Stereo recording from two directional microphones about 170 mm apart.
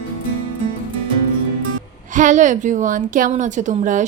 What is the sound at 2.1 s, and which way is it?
A woman's voice, 50° right (ahead or behind).